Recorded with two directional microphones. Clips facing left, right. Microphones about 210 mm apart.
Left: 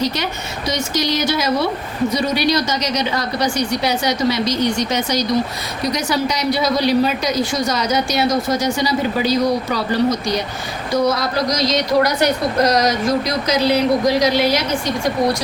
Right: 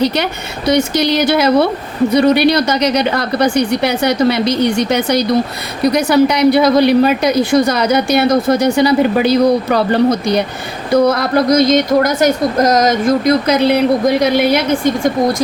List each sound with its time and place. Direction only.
0.0 s a woman's voice: 60° right (ahead or behind)